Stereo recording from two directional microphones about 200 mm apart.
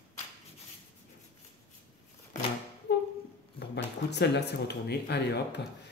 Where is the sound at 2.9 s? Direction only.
60° left (ahead or behind).